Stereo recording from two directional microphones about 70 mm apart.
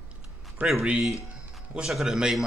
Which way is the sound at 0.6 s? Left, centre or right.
Right.